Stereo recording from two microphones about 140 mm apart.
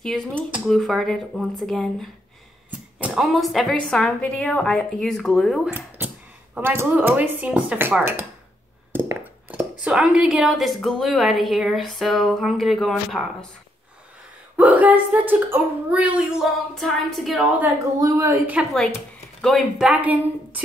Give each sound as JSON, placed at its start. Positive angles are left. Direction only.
{"t": 0.0, "sound": "a woman's voice", "side_deg": 5}
{"t": 5.7, "sound": "a sound", "side_deg": -10}
{"t": 6.6, "sound": "a woman's voice", "side_deg": -15}
{"t": 14.6, "sound": "a woman's voice", "side_deg": -10}
{"t": 17.9, "sound": "a woman's voice", "side_deg": -25}
{"t": 18.5, "sound": "a woman's voice", "side_deg": -5}